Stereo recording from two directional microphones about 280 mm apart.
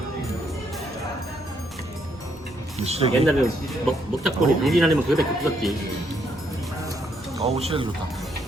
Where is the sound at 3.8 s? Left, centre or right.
Centre.